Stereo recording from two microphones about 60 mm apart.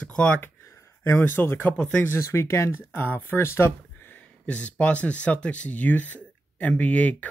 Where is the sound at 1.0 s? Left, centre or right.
Left.